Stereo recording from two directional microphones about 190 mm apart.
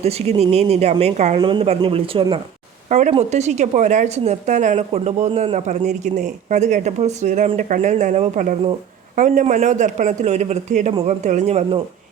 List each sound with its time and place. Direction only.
0.0 s speech: 35° right (ahead or behind)
1.4 s speech: 25° right (ahead or behind)